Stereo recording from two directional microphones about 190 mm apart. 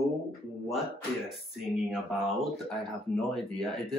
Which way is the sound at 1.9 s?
Centre (ahead or behind).